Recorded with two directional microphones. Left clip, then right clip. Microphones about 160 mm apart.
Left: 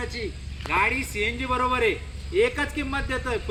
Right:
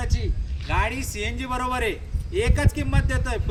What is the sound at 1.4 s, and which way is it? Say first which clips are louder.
A man's voice: left 2 dB; 40° right (ahead or behind).